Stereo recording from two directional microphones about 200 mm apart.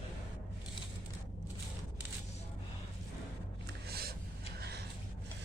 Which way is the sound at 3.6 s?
50° right (ahead or behind).